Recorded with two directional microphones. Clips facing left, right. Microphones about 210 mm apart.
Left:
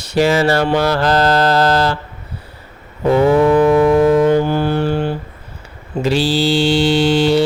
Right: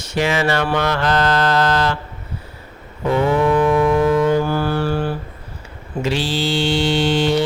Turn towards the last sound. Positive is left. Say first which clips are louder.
# left 4 dB
turn(degrees=35)  # may be behind; listen again after turning